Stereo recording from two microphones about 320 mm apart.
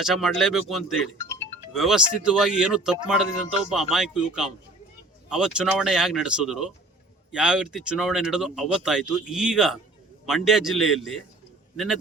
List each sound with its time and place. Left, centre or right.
0.0 s speech: centre